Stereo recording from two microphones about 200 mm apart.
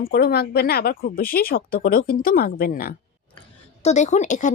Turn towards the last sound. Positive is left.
turn(degrees=40)  # may be behind; listen again after turning